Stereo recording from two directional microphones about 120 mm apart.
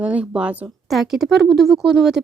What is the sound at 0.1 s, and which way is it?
Speech, 10° right (ahead or behind).